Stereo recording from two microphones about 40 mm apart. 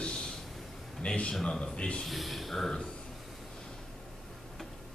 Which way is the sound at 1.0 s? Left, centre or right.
Left.